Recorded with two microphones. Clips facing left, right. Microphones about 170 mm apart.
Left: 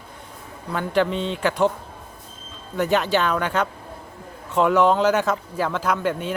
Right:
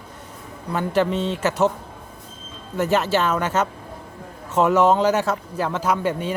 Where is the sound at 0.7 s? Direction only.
5° right (ahead or behind).